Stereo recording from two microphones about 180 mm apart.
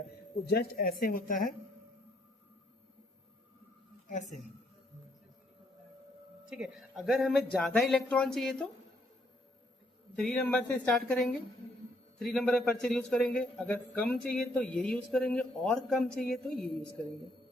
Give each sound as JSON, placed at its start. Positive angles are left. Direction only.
{"t": 0.4, "sound": "a woman's voice", "side_deg": 60}
{"t": 6.4, "sound": "a man's voice", "side_deg": -5}
{"t": 10.2, "sound": "a man's voice", "side_deg": 5}